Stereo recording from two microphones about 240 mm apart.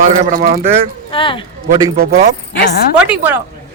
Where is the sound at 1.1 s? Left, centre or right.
Left.